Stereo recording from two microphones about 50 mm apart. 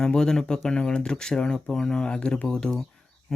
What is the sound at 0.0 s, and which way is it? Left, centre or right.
Speech, centre.